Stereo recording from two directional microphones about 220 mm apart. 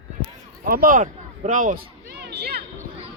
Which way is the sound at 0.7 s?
40° right (ahead or behind).